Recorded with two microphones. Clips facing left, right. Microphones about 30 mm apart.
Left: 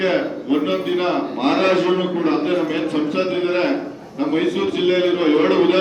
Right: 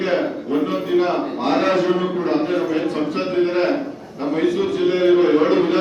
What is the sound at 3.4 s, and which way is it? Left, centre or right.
Speech, left.